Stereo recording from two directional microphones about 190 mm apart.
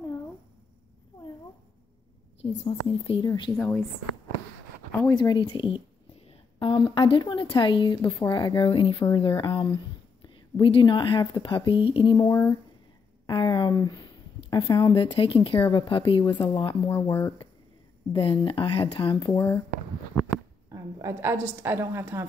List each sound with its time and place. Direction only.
2.6 s a woman's voice: 30° left (ahead or behind)
3.5 s a woman's voice: 10° left (ahead or behind)
5.1 s a woman's voice: 25° left (ahead or behind)
18.1 s a woman's voice: 25° left (ahead or behind)
20.7 s a woman's voice: 15° right (ahead or behind)